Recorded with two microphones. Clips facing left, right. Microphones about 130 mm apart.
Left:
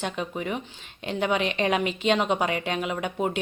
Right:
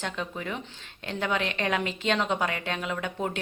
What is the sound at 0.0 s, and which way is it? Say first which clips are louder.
A woman's voice: left 3 dB; 15° left (ahead or behind).